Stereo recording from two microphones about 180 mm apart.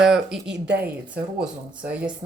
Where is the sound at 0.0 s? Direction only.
Centre (ahead or behind).